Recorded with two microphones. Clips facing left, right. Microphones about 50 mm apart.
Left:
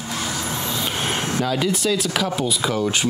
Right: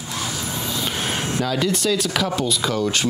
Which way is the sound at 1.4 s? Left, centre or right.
Centre.